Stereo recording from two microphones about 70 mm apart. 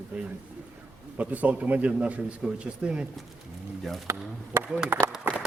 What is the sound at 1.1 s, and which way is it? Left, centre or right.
A man's voice, right.